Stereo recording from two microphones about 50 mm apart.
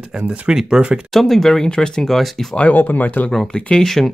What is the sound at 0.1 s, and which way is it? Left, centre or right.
Speech, centre.